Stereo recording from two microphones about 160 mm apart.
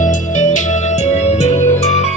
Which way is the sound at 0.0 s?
50° left (ahead or behind).